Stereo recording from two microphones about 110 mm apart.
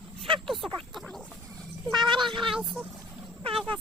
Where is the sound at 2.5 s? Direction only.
5° right (ahead or behind).